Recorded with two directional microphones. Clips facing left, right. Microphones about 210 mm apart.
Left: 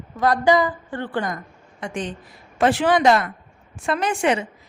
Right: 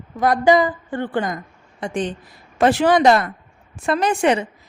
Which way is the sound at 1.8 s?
35° right (ahead or behind).